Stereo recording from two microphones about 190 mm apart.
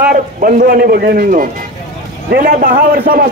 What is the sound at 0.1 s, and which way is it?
A man's voice, 45° right (ahead or behind).